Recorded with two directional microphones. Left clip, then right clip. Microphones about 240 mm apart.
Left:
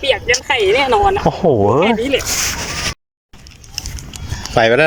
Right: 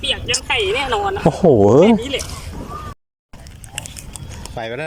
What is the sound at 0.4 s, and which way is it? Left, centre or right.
Speech, centre.